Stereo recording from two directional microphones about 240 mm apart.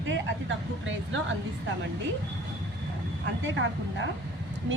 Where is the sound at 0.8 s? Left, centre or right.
Right.